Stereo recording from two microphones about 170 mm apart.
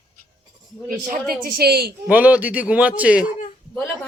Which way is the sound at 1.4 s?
65° right (ahead or behind).